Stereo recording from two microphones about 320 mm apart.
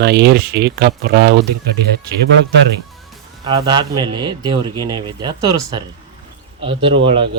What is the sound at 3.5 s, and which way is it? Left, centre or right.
A man's voice, centre.